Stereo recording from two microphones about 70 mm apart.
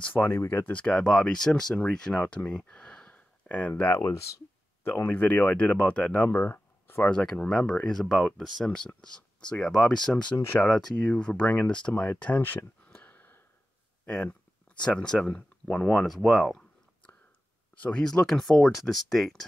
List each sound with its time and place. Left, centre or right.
0.1 s speech: left
7.0 s speech: centre
10.3 s speech: left
10.6 s speech: centre
14.9 s speech: centre
16.2 s speech: centre
17.7 s speech: centre
18.0 s speech: centre